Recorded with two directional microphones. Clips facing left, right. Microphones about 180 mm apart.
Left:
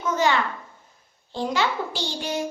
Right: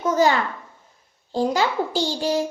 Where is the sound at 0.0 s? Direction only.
40° right (ahead or behind).